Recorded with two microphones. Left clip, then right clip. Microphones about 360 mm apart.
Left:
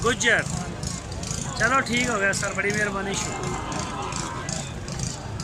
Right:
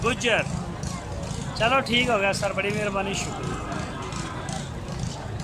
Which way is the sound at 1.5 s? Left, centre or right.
Centre.